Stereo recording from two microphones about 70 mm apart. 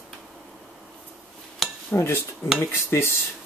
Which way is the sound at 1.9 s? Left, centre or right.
Left.